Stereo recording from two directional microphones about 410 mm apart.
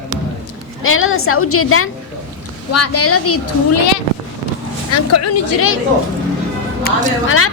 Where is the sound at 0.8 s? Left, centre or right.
Left.